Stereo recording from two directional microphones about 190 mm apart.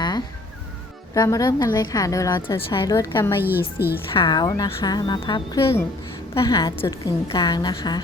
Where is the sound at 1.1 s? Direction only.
20° left (ahead or behind).